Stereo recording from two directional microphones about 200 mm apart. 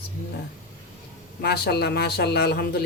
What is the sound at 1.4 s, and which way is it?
Speech, 50° left (ahead or behind).